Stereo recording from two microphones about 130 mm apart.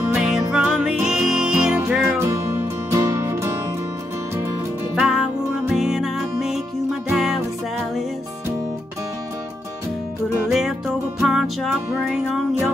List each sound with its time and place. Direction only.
0.1 s music: 5° right (ahead or behind)
2.0 s music: 20° right (ahead or behind)
4.9 s music: 5° right (ahead or behind)
11.1 s music: 5° right (ahead or behind)